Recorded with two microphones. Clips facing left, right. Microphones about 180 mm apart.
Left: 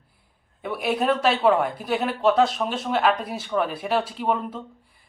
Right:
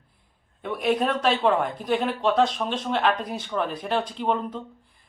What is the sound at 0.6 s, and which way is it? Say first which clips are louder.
Speech: even; 5° left (ahead or behind).